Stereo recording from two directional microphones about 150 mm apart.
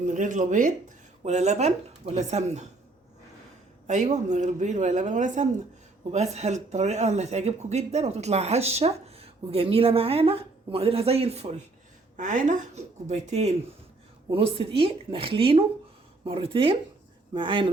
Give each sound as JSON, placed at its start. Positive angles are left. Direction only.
{"t": 0.0, "sound": "a woman's voice", "side_deg": -55}
{"t": 1.2, "sound": "speech", "side_deg": -50}
{"t": 3.8, "sound": "a woman's voice", "side_deg": -55}